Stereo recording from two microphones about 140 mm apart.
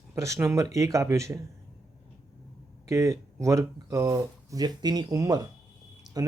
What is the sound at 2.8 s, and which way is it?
Speech, 20° right (ahead or behind).